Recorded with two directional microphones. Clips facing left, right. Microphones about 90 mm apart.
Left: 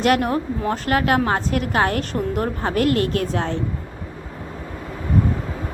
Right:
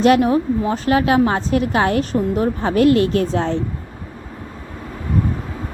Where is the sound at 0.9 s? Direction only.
50° left (ahead or behind).